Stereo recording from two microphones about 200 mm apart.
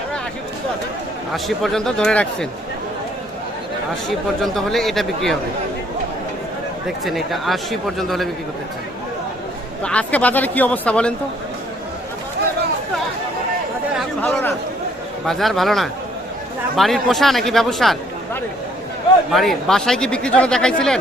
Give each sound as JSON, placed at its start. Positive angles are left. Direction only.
{"t": 1.3, "sound": "speech", "side_deg": 0}
{"t": 4.4, "sound": "speech", "side_deg": 0}
{"t": 6.8, "sound": "speech", "side_deg": 0}
{"t": 9.8, "sound": "speech", "side_deg": 5}
{"t": 14.2, "sound": "speech", "side_deg": 10}
{"t": 19.3, "sound": "speech", "side_deg": 0}